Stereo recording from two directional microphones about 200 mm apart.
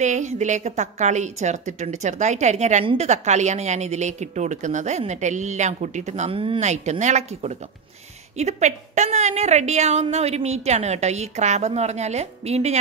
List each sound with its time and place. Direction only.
0.0 s a woman's voice: 35° right (ahead or behind)